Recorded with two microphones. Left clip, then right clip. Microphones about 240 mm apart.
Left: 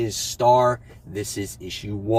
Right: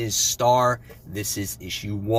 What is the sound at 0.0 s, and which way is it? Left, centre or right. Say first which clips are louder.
Speech: left 1 dB; centre.